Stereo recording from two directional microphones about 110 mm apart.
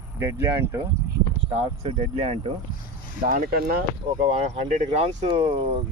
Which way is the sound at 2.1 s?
65° right (ahead or behind).